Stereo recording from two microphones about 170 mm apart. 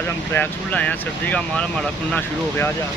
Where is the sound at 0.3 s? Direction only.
10° left (ahead or behind).